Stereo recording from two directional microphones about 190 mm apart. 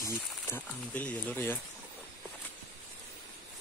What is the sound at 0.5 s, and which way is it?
Speech, 10° left (ahead or behind).